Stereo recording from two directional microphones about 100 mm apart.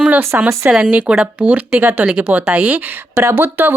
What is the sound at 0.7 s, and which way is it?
Speech, 15° right (ahead or behind).